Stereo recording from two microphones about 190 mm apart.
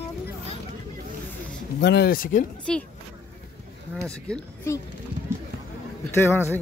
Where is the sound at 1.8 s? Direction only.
60° left (ahead or behind); by 2.5 s 45° left (ahead or behind).